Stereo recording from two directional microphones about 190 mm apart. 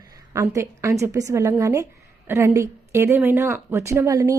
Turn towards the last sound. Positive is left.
turn(degrees=-15)  # may be behind; listen again after turning